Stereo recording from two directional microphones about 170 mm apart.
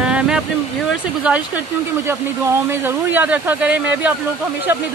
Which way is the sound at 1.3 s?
5° right (ahead or behind).